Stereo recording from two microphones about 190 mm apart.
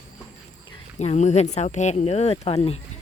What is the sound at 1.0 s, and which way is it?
Speech, 35° left (ahead or behind).